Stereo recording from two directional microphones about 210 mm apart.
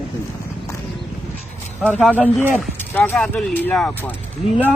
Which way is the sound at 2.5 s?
5° left (ahead or behind).